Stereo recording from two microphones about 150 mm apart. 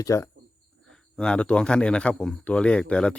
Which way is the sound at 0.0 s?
20° left (ahead or behind).